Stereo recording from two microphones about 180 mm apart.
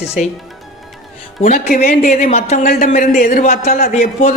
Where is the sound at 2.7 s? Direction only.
50° left (ahead or behind).